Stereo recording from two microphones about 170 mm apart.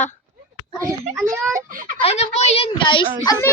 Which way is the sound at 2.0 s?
40° left (ahead or behind).